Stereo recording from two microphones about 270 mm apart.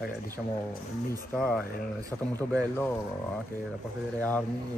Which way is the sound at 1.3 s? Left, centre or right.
Centre.